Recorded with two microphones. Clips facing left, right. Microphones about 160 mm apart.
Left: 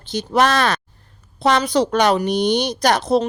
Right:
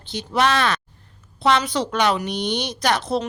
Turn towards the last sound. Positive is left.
turn(degrees=40)  # may be behind; listen again after turning